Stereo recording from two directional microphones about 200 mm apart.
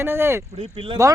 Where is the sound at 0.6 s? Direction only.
25° right (ahead or behind).